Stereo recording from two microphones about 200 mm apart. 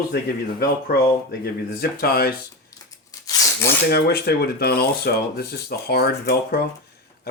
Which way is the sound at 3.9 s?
50° left (ahead or behind).